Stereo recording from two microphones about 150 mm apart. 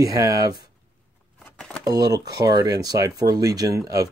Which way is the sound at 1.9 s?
25° right (ahead or behind).